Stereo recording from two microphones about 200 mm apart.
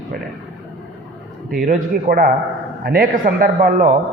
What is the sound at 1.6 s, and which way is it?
A man's voice, 45° right (ahead or behind).